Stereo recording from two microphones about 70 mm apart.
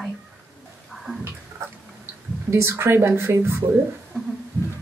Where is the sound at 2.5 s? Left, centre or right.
Right.